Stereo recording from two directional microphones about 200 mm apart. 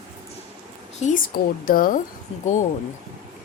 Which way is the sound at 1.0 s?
35° left (ahead or behind).